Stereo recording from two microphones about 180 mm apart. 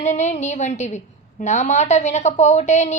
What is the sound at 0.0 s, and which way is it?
A woman's voice, 40° left (ahead or behind).